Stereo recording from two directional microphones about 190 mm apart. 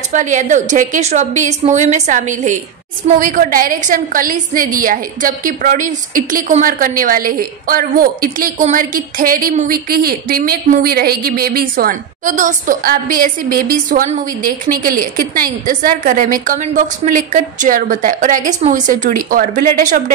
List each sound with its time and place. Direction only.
0.1 s a woman's voice: 40° right (ahead or behind)